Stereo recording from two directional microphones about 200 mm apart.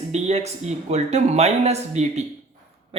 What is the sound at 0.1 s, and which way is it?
Speech, 35° right (ahead or behind).